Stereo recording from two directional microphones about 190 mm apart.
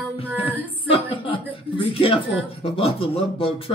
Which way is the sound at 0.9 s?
30° left (ahead or behind).